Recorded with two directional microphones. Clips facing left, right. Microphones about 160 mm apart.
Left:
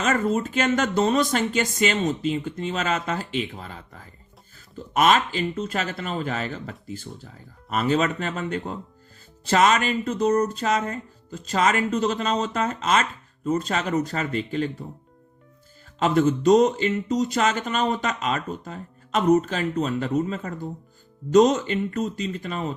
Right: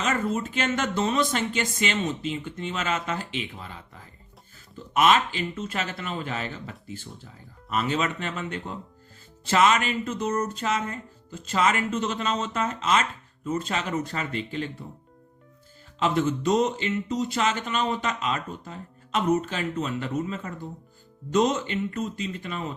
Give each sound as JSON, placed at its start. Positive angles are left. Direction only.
{"t": 0.3, "sound": "speech", "side_deg": 40}
{"t": 4.9, "sound": "speech", "side_deg": 40}
{"t": 16.0, "sound": "speech", "side_deg": 45}